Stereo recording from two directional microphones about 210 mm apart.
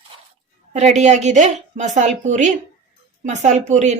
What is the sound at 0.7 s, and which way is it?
A woman's voice, 35° right (ahead or behind).